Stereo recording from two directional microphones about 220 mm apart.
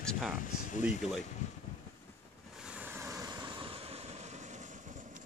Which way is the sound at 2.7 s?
10° right (ahead or behind).